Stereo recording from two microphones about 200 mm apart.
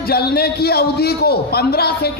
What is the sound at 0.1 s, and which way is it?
A man's voice, 50° left (ahead or behind).